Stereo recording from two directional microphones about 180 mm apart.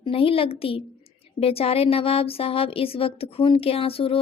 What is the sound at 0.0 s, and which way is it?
Speech, 30° left (ahead or behind).